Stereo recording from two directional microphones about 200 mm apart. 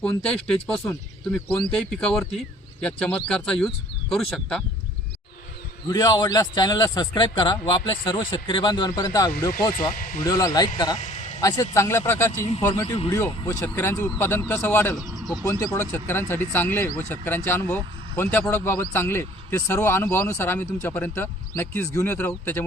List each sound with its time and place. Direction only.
0.3 s speech: 5° left (ahead or behind)
5.9 s a man's voice: 20° left (ahead or behind)
9.9 s speech: 45° left (ahead or behind)
10.2 s a man's voice: 20° left (ahead or behind)
11.0 s a sound: 35° left (ahead or behind)
11.3 s speech: 20° left (ahead or behind)